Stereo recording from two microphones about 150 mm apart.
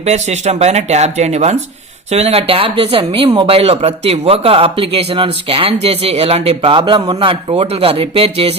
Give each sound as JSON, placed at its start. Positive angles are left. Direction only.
{"t": 0.0, "sound": "speech", "side_deg": -50}